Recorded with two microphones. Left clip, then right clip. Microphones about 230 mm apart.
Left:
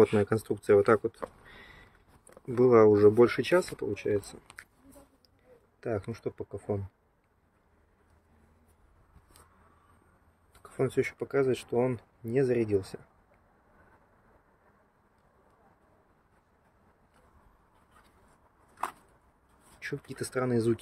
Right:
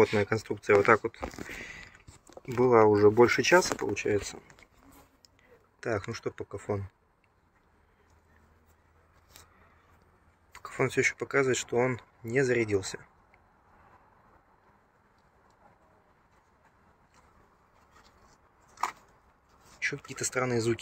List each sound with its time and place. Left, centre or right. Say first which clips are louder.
0.0 s speech: left 1 dB; centre
1.6 s a sound: right 9 dB; centre
2.5 s speech: left 1 dB; centre
5.8 s speech: right 2 dB; centre
10.5 s speech: right 1 dB; centre
19.8 s speech: right 5 dB; left